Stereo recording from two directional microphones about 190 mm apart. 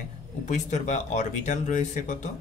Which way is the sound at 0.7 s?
40° left (ahead or behind).